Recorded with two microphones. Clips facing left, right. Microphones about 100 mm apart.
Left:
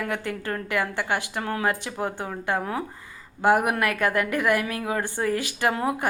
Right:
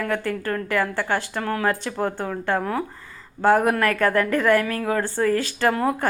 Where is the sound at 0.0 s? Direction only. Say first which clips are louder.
Right 4 dB; 20° left (ahead or behind).